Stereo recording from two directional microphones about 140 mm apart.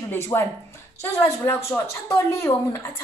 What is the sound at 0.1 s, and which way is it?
A woman's voice, 20° left (ahead or behind).